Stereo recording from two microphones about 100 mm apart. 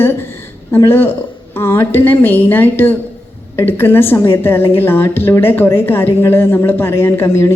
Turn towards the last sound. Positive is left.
turn(degrees=25)  # may be behind; listen again after turning